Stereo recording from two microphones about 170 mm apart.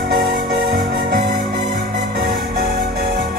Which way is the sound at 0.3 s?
60° right (ahead or behind).